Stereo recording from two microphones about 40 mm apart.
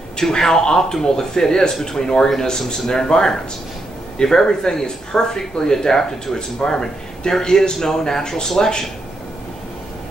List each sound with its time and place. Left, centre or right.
0.2 s speech: centre